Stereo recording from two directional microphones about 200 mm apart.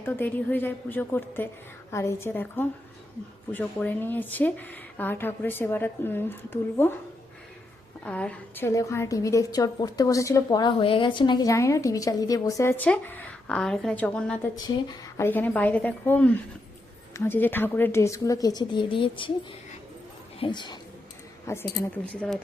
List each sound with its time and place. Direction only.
0.0 s a woman's voice: 10° left (ahead or behind)
8.0 s a woman's voice: 5° left (ahead or behind); by 19.3 s 25° left (ahead or behind)
20.4 s a woman's voice: 20° left (ahead or behind)